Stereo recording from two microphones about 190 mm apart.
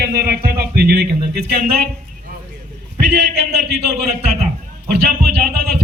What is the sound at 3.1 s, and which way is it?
Speech, 60° right (ahead or behind).